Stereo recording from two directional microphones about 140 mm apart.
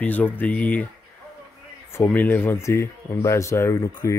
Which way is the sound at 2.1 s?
15° left (ahead or behind).